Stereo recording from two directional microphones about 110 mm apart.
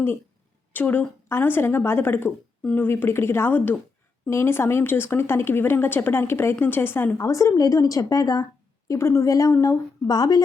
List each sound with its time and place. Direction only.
0.7 s speech: 15° left (ahead or behind); by 10.4 s 35° left (ahead or behind)